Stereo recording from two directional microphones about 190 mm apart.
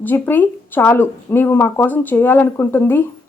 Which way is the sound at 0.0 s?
10° left (ahead or behind).